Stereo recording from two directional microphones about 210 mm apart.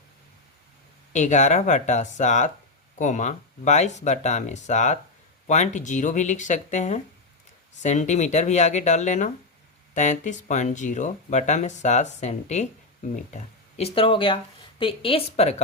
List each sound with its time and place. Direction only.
1.1 s speech: 35° left (ahead or behind)